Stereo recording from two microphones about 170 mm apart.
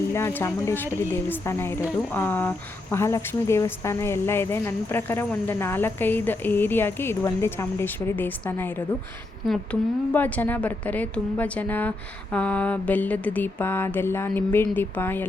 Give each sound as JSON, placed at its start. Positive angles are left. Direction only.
{"t": 0.1, "sound": "speech", "side_deg": 15}
{"t": 10.1, "sound": "speech", "side_deg": 10}